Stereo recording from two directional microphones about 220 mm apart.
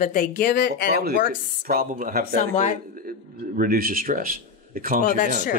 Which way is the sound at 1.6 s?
40° right (ahead or behind).